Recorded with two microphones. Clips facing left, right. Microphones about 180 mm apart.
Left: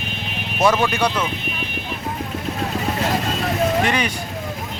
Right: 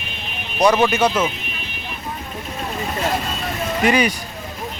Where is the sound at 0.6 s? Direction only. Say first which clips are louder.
Right 2 dB; 20° right (ahead or behind).